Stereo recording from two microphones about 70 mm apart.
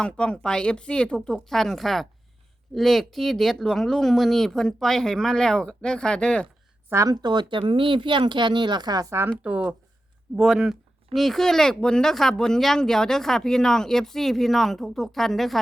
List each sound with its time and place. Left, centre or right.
0.0 s a woman's voice: centre
7.1 s speech: right
9.0 s speech: right
9.4 s speech: right
10.3 s speech: centre